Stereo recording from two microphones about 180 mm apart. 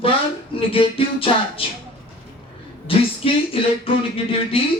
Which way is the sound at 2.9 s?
30° left (ahead or behind).